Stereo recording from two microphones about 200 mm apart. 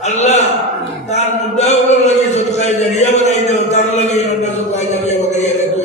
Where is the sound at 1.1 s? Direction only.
35° left (ahead or behind).